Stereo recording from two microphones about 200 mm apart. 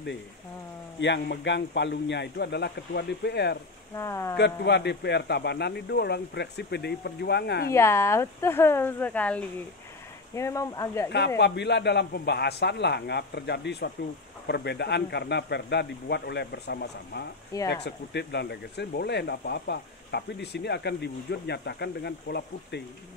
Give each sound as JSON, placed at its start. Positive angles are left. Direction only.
{"t": 1.0, "sound": "speech", "side_deg": 60}
{"t": 3.9, "sound": "speech", "side_deg": 15}
{"t": 4.4, "sound": "speech", "side_deg": 55}
{"t": 7.7, "sound": "speech", "side_deg": 15}
{"t": 11.1, "sound": "speech", "side_deg": 55}